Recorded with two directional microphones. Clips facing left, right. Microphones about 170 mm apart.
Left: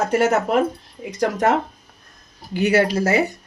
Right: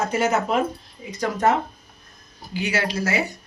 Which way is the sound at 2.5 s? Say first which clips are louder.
Left 8 dB; 55° left (ahead or behind).